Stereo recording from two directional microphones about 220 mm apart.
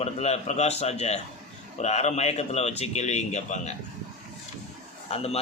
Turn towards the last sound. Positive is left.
turn(degrees=30)  # may be behind; listen again after turning